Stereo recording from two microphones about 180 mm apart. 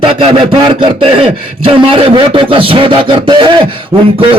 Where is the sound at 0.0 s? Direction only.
25° right (ahead or behind).